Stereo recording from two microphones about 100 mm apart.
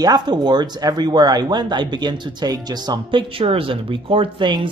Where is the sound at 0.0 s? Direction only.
45° right (ahead or behind).